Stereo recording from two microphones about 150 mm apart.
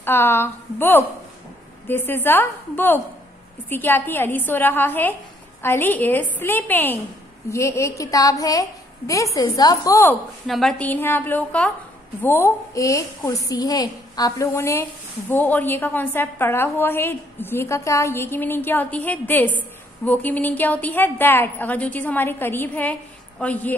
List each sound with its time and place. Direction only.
0.0 s a woman's voice: 15° left (ahead or behind)
10.4 s a woman's voice: centre (ahead or behind)